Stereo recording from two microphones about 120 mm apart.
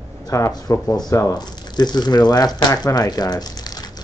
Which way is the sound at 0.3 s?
30° left (ahead or behind).